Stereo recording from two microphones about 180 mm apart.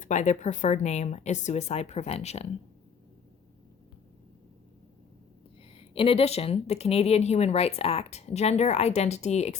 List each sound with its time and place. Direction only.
0.0 s speech: 40° left (ahead or behind)
5.7 s speech: 30° left (ahead or behind)